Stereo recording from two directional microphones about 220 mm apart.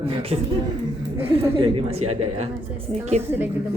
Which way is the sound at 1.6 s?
25° right (ahead or behind).